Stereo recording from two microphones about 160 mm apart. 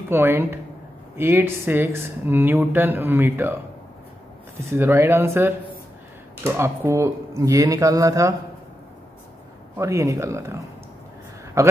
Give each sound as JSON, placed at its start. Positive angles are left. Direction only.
{"t": 0.1, "sound": "speech", "side_deg": -15}
{"t": 4.7, "sound": "speech", "side_deg": -15}
{"t": 9.8, "sound": "speech", "side_deg": -20}